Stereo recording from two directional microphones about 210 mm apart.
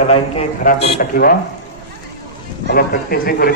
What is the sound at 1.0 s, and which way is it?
Speech, 45° left (ahead or behind).